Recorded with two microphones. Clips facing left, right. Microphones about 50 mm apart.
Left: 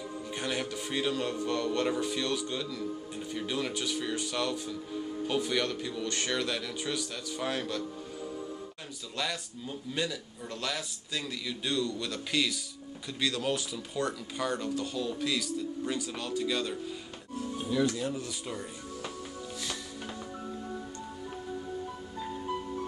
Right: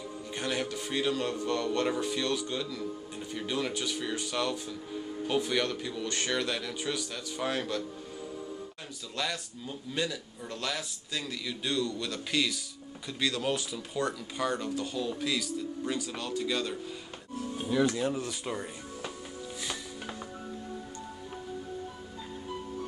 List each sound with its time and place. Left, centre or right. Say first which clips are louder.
0.3 s speech: right 2 dB; centre
9.1 s speech: even; centre
17.6 s speech: right 2 dB; right
17.9 s speech: right 3 dB; right
19.6 s music: right 2 dB; centre